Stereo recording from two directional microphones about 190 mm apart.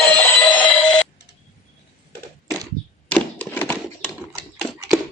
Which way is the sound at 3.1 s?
10° left (ahead or behind).